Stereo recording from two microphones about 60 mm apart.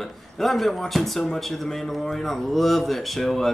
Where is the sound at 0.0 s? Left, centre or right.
Centre.